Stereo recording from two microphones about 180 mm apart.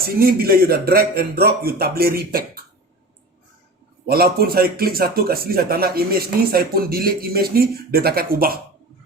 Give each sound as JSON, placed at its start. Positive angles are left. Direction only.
{"t": 0.0, "sound": "a man's voice", "side_deg": -55}
{"t": 4.0, "sound": "a man's voice", "side_deg": -60}